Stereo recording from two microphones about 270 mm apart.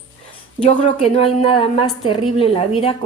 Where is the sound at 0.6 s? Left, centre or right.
Left.